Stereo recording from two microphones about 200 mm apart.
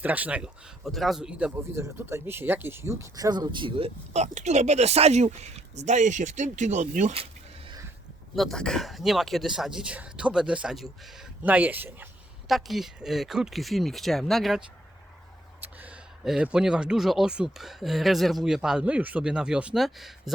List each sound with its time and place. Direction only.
0.0 s speech: 10° right (ahead or behind); by 7.3 s 35° right (ahead or behind)
8.4 s speech: centre (ahead or behind)
15.6 s speech: 5° right (ahead or behind)